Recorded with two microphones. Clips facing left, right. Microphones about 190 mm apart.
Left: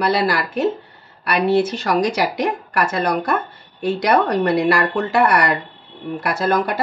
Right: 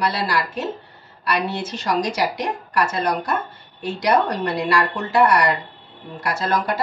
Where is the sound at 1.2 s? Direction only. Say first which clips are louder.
Left 7 dB; 60° left (ahead or behind).